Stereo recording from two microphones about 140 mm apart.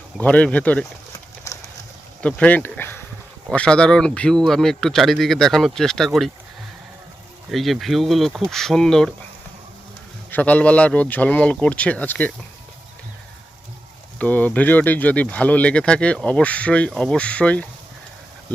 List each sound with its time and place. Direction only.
0.2 s speech: 10° left (ahead or behind)
1.5 s boat: 20° left (ahead or behind)
2.2 s a man's voice: 10° left (ahead or behind)
7.5 s a man's voice: centre (ahead or behind)
10.3 s speech: 10° left (ahead or behind)
14.2 s speech: 10° left (ahead or behind)